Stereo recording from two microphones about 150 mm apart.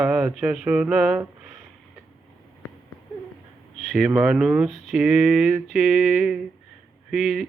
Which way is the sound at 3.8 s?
5° right (ahead or behind).